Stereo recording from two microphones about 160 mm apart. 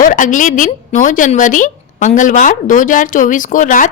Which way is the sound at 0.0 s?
55° left (ahead or behind).